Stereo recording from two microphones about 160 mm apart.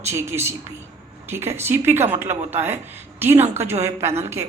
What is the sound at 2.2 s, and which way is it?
Speech, 45° right (ahead or behind).